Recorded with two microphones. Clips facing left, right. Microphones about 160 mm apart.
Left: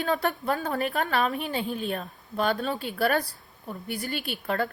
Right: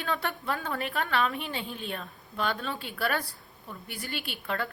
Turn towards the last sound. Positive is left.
turn(degrees=45)  # may be behind; listen again after turning